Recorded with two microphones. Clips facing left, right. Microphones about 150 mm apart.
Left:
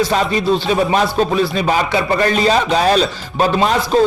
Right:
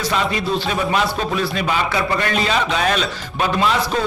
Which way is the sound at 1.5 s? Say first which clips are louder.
Left 4 dB; 40° left (ahead or behind).